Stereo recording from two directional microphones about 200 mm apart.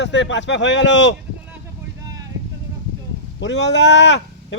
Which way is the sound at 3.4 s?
60° left (ahead or behind).